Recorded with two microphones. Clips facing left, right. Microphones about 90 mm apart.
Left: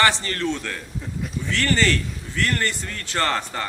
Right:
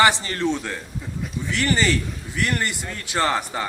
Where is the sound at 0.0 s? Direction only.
15° right (ahead or behind).